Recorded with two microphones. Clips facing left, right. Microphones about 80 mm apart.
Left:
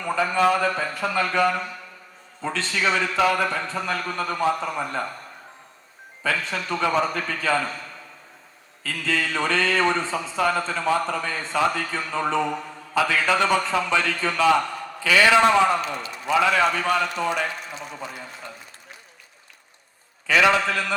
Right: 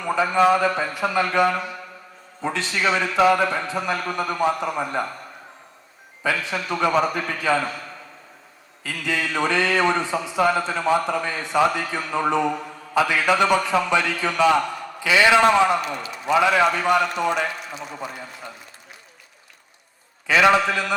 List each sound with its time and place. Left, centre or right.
0.0 s a man's voice: centre
6.2 s a man's voice: centre
8.8 s a man's voice: centre
20.2 s a man's voice: centre